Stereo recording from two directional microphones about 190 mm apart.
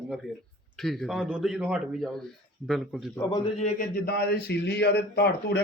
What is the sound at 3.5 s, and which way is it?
Speech, 35° left (ahead or behind).